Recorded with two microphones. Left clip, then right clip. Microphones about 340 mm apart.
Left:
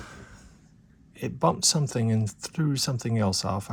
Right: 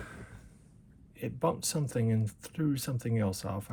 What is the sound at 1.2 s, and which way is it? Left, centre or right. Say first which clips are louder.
Speech: left 7 dB; centre.